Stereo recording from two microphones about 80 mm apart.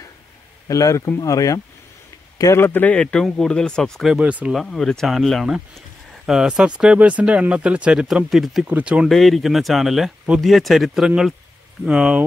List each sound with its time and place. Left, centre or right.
0.7 s speech: left
2.5 s speech: left; by 4.1 s centre
4.1 s speech: centre
4.6 s speech: centre
8.3 s speech: centre
8.6 s speech: centre
9.1 s speech: centre